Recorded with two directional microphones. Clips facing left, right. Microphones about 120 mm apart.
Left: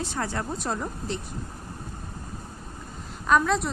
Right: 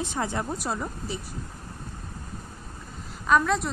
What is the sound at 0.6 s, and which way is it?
Speech, 5° right (ahead or behind).